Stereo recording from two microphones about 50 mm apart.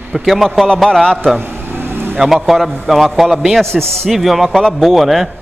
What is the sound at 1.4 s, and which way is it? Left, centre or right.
Vehicle, right.